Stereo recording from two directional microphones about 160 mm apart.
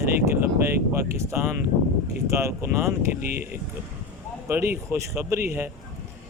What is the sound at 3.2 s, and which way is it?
Speech, 70° right (ahead or behind).